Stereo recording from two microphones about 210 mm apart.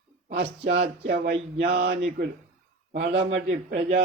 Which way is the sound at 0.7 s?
55° right (ahead or behind).